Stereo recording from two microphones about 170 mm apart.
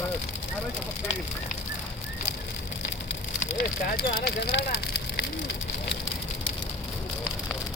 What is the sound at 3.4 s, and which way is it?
Speech, 65° left (ahead or behind).